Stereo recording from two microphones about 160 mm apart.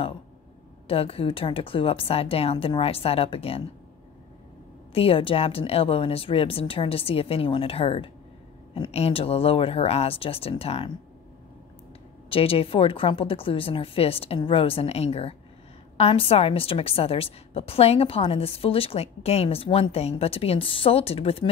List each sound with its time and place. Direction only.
0.8 s a woman's voice: 35° left (ahead or behind)
4.9 s a woman's voice: 35° left (ahead or behind)
12.3 s a woman's voice: 35° left (ahead or behind)